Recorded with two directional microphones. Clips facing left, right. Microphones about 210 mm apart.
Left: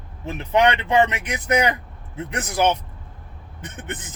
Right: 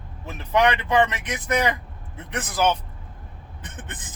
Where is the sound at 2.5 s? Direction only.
25° left (ahead or behind).